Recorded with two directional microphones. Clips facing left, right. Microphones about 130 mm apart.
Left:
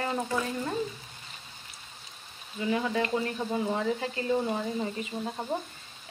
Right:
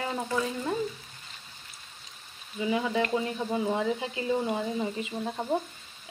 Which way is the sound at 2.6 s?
15° right (ahead or behind).